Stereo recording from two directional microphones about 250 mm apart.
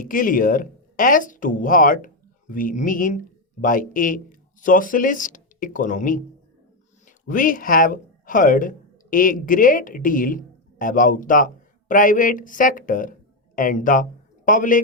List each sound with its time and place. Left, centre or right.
0.0 s speech: left
7.3 s a man's voice: left